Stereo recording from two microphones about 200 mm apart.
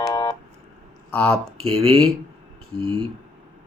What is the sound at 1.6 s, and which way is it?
Speech, 30° right (ahead or behind).